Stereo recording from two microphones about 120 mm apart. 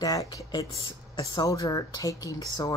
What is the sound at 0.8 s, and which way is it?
Speech, 45° left (ahead or behind).